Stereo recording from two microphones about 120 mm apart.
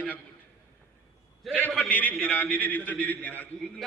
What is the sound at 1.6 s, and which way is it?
A man's voice, 10° left (ahead or behind).